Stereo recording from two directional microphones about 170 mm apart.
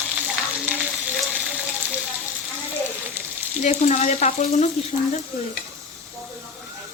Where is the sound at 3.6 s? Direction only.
45° left (ahead or behind).